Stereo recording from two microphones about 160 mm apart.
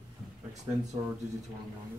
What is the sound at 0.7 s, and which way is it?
Speech, 15° right (ahead or behind).